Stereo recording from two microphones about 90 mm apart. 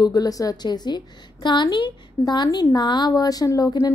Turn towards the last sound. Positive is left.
turn(degrees=40)  # may be behind; listen again after turning